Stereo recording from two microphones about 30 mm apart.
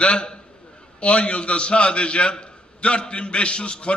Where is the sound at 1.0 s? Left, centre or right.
Left.